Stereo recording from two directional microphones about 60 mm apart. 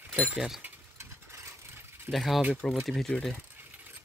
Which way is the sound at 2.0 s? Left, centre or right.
Centre.